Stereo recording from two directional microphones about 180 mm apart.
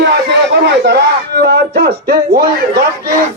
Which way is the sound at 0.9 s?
65° right (ahead or behind).